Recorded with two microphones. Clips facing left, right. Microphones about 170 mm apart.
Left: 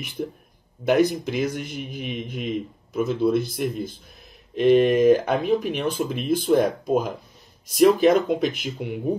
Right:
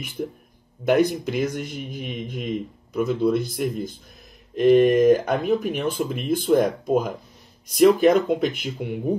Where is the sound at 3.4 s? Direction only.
50° right (ahead or behind).